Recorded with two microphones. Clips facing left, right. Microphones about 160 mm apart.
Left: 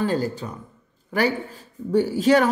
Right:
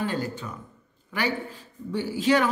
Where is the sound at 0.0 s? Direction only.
35° left (ahead or behind).